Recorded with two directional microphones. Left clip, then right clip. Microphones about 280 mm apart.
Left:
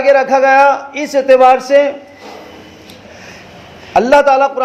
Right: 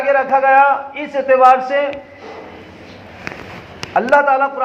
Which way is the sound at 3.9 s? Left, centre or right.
Left.